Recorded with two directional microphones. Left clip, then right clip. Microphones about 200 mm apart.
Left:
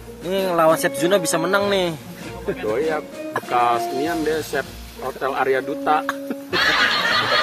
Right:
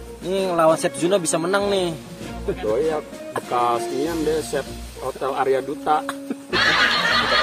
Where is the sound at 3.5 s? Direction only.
15° right (ahead or behind).